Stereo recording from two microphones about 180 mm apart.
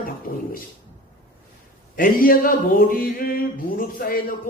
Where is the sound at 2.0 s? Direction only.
50° left (ahead or behind).